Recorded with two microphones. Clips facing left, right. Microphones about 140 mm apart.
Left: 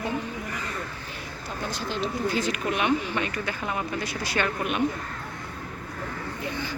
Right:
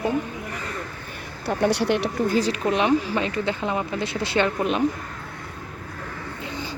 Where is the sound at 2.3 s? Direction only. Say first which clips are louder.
Right 6 dB; 35° right (ahead or behind).